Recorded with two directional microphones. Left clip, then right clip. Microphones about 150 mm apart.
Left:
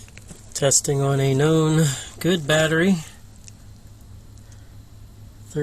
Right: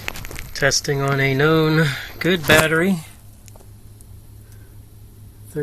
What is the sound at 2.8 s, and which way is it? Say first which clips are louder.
Speech: right 1 dB; centre (ahead or behind).